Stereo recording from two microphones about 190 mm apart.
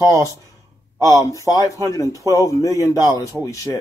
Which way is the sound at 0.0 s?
15° left (ahead or behind).